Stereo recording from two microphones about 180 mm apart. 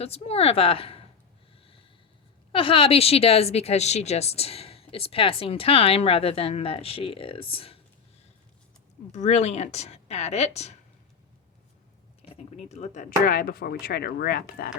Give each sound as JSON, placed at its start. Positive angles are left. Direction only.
{"t": 0.0, "sound": "speech", "side_deg": 35}
{"t": 2.5, "sound": "speech", "side_deg": 30}
{"t": 9.1, "sound": "speech", "side_deg": 40}
{"t": 12.5, "sound": "speech", "side_deg": 35}